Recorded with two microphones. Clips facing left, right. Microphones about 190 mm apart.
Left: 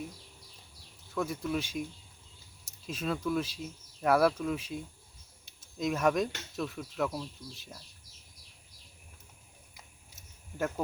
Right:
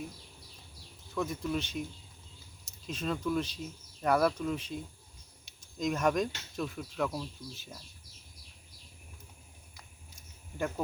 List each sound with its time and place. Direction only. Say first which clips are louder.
1.1 s speech: left 1 dB; 5° left (ahead or behind)